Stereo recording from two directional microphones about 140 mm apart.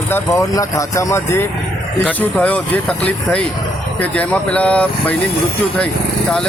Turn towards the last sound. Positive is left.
turn(degrees=10)  # may be behind; listen again after turning